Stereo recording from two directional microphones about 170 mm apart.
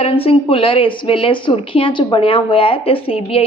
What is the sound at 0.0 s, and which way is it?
A woman's voice, 35° left (ahead or behind).